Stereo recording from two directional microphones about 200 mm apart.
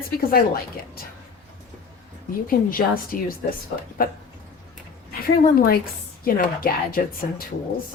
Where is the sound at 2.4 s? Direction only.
45° left (ahead or behind).